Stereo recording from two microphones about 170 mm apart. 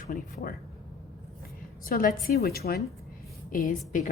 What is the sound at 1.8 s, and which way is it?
A woman's voice, 60° left (ahead or behind).